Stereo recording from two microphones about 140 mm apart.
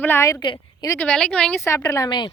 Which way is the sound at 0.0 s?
15° left (ahead or behind).